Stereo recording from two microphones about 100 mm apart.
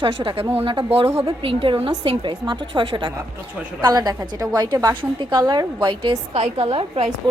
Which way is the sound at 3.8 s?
45° right (ahead or behind).